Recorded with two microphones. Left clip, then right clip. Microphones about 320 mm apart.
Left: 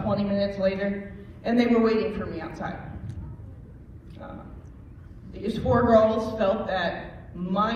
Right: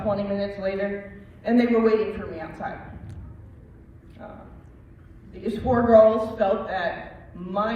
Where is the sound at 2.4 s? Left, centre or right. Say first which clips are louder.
Right 1 dB; centre.